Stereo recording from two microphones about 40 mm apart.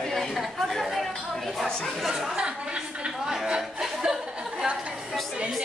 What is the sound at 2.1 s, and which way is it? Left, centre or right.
Speech, centre.